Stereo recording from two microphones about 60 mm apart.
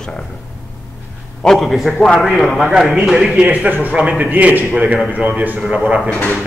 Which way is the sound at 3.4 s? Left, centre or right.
Right.